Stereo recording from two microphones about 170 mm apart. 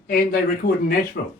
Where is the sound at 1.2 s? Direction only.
70° left (ahead or behind).